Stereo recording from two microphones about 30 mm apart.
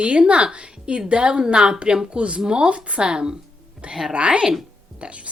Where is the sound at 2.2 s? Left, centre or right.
Right.